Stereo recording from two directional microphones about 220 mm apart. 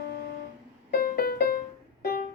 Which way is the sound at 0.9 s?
45° left (ahead or behind).